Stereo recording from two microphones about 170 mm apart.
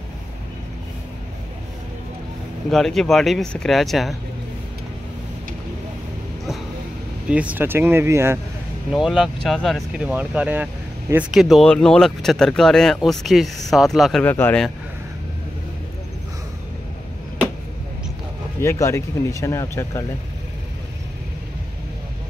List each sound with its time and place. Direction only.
2.7 s speech: centre (ahead or behind)
7.2 s speech: 10° right (ahead or behind)
8.9 s speech: centre (ahead or behind)
14.2 s speech: 10° left (ahead or behind)
18.6 s speech: 15° left (ahead or behind)